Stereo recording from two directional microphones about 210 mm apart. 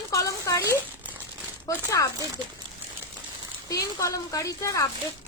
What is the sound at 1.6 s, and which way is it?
Speech, 15° left (ahead or behind).